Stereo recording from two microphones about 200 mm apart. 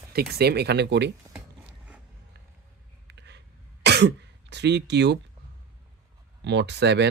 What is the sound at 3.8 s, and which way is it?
Throat clearing, 60° right (ahead or behind).